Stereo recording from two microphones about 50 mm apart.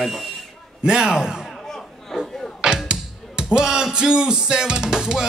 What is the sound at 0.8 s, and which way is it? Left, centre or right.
Speech, centre.